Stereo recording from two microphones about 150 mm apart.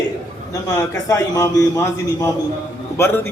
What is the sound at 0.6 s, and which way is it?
A man's voice, 20° left (ahead or behind).